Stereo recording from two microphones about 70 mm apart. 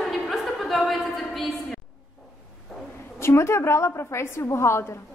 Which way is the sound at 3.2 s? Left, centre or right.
Left.